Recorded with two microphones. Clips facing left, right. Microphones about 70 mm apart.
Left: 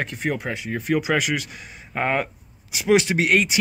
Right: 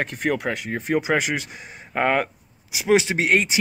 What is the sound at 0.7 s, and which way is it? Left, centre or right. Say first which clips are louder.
Speech: left 1 dB; right.